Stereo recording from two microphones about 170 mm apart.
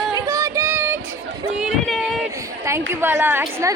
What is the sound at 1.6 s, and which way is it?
Speech, centre (ahead or behind).